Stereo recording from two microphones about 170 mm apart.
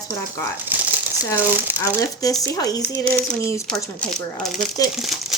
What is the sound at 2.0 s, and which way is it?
Speech, 20° left (ahead or behind).